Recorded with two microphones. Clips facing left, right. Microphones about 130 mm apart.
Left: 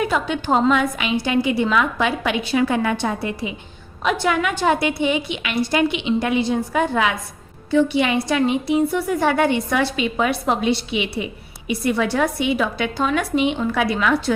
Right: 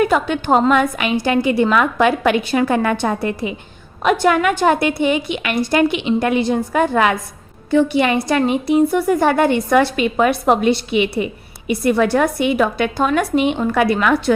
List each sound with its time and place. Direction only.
0.0 s a woman's voice: 55° right (ahead or behind)